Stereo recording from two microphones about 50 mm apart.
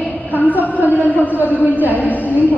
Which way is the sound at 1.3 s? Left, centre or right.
Right.